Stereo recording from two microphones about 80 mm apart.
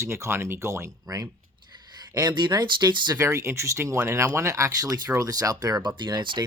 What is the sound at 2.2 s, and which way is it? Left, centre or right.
Speech, right.